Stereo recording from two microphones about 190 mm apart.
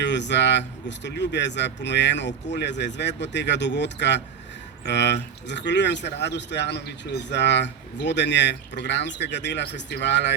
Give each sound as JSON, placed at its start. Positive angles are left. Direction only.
{"t": 0.0, "sound": "a man's voice", "side_deg": 65}